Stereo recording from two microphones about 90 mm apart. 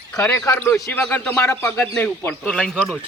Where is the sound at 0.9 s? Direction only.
20° left (ahead or behind).